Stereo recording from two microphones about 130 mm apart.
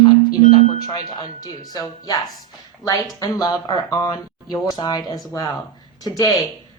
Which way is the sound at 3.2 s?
25° left (ahead or behind).